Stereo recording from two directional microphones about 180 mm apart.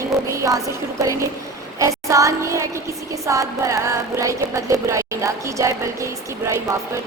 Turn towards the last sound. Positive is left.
turn(degrees=-15)  # may be behind; listen again after turning